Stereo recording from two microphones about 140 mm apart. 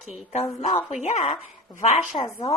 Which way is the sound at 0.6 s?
55° left (ahead or behind).